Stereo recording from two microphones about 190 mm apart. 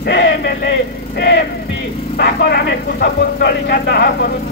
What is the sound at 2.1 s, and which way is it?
Speech, 60° left (ahead or behind).